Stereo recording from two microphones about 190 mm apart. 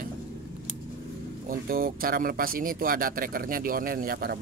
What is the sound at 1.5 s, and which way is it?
Speech, 50° right (ahead or behind).